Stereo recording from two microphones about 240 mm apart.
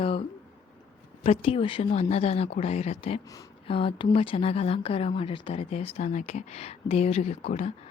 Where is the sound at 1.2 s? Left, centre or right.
Left.